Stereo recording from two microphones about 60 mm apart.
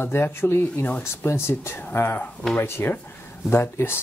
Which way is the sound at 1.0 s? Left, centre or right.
Left.